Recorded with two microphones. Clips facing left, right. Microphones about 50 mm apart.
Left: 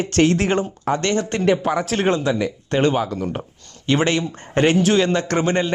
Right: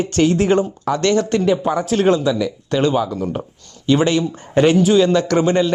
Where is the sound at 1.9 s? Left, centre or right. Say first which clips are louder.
Right 6 dB; left.